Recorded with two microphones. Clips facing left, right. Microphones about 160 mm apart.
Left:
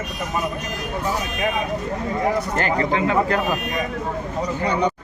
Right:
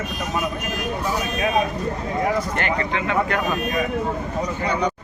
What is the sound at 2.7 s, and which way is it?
Speech, 35° left (ahead or behind).